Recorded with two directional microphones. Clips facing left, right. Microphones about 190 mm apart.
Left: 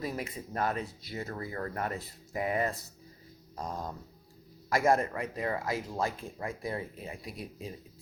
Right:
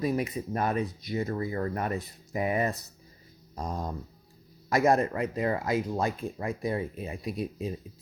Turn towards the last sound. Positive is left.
turn(degrees=-20)  # may be behind; listen again after turning